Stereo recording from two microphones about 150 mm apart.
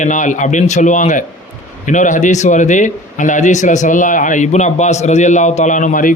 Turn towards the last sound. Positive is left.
turn(degrees=60)  # may be behind; listen again after turning